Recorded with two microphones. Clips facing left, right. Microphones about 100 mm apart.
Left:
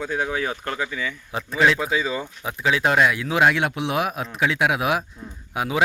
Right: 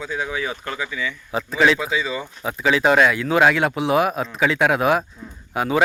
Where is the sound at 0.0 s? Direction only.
50° left (ahead or behind).